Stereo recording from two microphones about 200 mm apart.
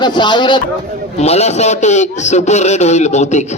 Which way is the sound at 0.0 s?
20° left (ahead or behind).